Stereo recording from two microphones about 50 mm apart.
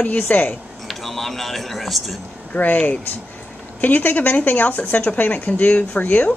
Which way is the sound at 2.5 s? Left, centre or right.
Left.